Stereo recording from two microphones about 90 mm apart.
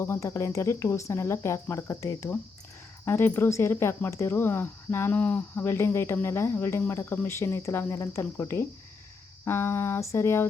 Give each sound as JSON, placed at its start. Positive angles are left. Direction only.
{"t": 0.0, "sound": "speech", "side_deg": 30}